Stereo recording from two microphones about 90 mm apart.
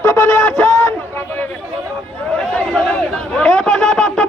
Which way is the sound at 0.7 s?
25° left (ahead or behind).